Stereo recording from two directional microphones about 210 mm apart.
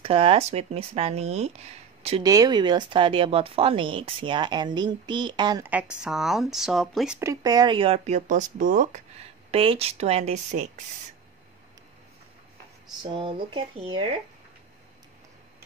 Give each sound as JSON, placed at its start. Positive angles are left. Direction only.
{"t": 0.0, "sound": "speech", "side_deg": -25}
{"t": 2.2, "sound": "speech", "side_deg": -15}
{"t": 5.7, "sound": "speech", "side_deg": -5}
{"t": 7.2, "sound": "speech", "side_deg": -15}
{"t": 9.5, "sound": "speech", "side_deg": -25}
{"t": 13.0, "sound": "speech", "side_deg": -25}